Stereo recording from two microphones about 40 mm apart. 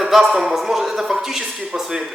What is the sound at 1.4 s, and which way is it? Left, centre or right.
Speech, right.